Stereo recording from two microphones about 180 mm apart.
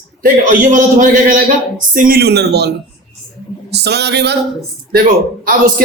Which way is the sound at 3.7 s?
65° right (ahead or behind).